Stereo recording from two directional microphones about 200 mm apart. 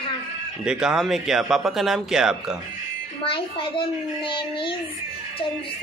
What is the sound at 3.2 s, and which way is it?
A child's voice, 25° left (ahead or behind).